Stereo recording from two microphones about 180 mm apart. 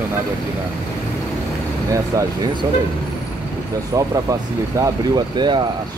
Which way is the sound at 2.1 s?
20° right (ahead or behind).